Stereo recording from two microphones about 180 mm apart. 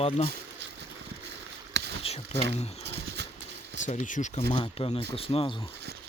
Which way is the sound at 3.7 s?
45° left (ahead or behind).